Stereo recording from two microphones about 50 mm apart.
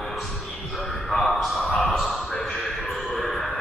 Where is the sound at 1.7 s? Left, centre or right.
Centre.